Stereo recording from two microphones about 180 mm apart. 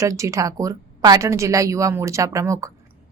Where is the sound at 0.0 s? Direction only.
15° right (ahead or behind).